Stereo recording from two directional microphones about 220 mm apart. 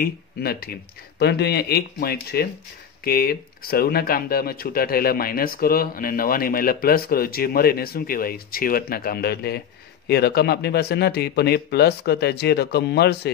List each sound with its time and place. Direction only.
0.0 s speech: 45° left (ahead or behind)